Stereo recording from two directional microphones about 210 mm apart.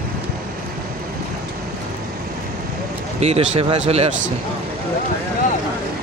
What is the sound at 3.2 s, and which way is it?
Speech, 30° right (ahead or behind).